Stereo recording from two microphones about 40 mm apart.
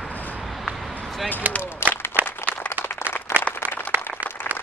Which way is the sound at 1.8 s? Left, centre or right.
Left.